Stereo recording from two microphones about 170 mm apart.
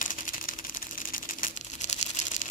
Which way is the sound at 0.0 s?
50° left (ahead or behind).